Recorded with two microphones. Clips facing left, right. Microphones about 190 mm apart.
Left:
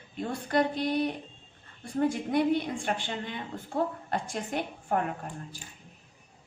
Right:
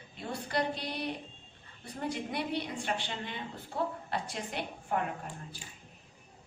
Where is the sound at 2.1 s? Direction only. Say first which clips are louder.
Left 8 dB; 50° left (ahead or behind).